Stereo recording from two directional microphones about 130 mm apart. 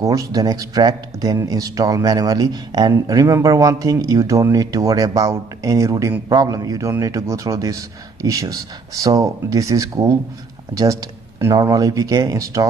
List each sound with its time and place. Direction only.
0.0 s speech: 25° right (ahead or behind)